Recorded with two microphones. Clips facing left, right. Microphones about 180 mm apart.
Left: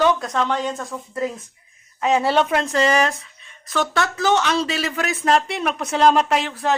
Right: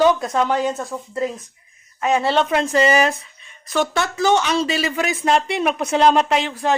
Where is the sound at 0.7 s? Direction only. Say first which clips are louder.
Right 2 dB; 20° right (ahead or behind).